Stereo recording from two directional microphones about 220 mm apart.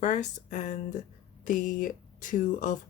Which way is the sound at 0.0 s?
35° left (ahead or behind).